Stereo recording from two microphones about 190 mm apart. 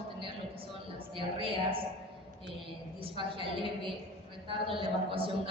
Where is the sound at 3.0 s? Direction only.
30° right (ahead or behind).